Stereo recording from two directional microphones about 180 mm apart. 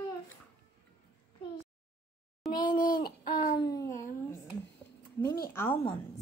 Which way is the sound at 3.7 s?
15° left (ahead or behind).